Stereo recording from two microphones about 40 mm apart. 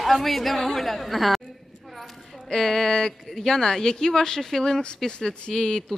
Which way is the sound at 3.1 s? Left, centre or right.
Centre.